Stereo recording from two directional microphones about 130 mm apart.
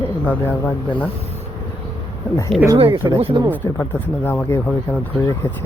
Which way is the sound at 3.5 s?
15° left (ahead or behind).